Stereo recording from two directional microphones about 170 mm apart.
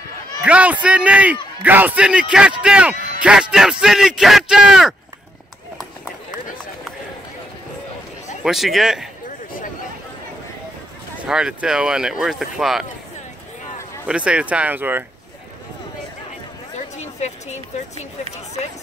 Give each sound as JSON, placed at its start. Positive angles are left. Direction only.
{"t": 0.5, "sound": "a man's voice", "side_deg": -10}
{"t": 8.4, "sound": "speech", "side_deg": 0}
{"t": 11.2, "sound": "speech", "side_deg": -5}
{"t": 14.0, "sound": "a man's voice", "side_deg": -5}
{"t": 16.7, "sound": "a woman's voice", "side_deg": 40}